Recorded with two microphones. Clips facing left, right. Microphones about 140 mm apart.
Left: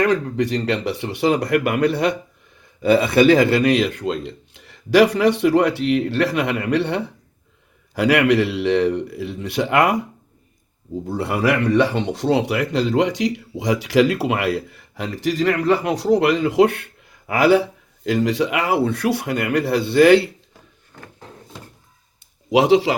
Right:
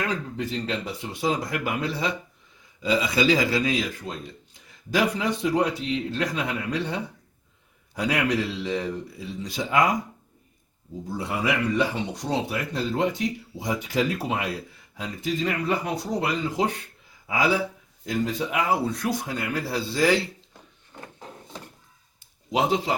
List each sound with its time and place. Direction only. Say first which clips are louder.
0.0 s speech: left 10 dB; 75° left (ahead or behind)
11.0 s speech: left 7 dB; 65° left (ahead or behind)
18.0 s speech: left 8 dB; 80° left
20.9 s a sound: left 1 dB; 15° right (ahead or behind)
22.5 s a man's voice: left 9 dB; 85° left